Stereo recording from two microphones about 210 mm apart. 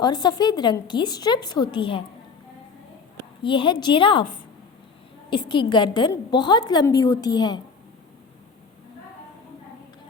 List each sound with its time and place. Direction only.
0.0 s a woman's voice: 20° left (ahead or behind)
3.4 s a woman's voice: 25° left (ahead or behind)
5.3 s a woman's voice: 20° left (ahead or behind)